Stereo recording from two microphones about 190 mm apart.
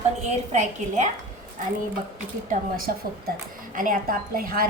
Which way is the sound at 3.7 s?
45° right (ahead or behind).